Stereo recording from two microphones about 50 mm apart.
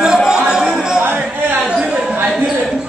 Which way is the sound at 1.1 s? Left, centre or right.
Right.